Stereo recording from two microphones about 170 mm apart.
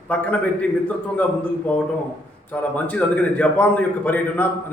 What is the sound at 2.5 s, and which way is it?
A man's voice, 10° left (ahead or behind).